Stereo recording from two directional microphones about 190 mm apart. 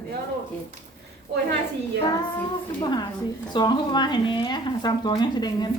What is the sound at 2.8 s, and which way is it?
Speech, 20° left (ahead or behind).